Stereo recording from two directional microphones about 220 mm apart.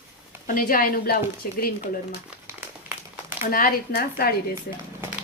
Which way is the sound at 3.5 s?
40° left (ahead or behind).